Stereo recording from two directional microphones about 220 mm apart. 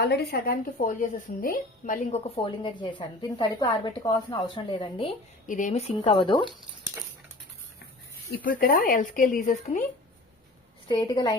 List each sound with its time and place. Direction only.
0.0 s speech: 50° left (ahead or behind); by 5.1 s 25° left (ahead or behind)
5.5 s speech: 35° left (ahead or behind)
8.4 s speech: 40° left (ahead or behind)
10.8 s speech: 15° left (ahead or behind)